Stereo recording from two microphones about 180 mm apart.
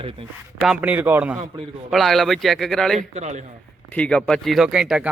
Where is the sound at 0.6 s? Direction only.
5° right (ahead or behind).